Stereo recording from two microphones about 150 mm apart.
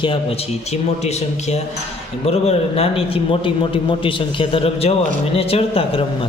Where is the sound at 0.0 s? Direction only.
40° left (ahead or behind).